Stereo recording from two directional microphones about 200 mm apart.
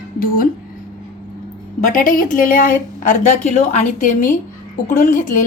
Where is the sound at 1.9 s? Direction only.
40° left (ahead or behind).